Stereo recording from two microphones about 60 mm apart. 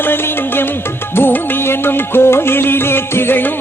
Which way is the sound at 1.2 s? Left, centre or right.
Left.